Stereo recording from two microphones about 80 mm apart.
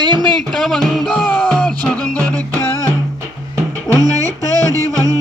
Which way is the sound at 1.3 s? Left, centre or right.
Centre.